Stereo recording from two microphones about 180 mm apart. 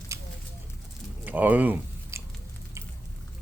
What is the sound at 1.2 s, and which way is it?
Chewing, 10° right (ahead or behind).